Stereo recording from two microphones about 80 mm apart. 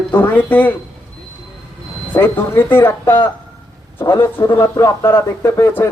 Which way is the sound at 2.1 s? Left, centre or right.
Left.